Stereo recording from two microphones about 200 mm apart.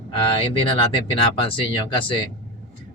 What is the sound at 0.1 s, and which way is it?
Speech, 25° left (ahead or behind).